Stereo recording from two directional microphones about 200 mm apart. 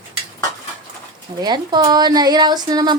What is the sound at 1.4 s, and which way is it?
Speech, 20° right (ahead or behind).